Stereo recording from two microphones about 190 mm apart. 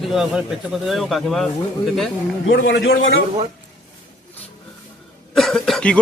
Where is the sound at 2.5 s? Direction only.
65° left (ahead or behind).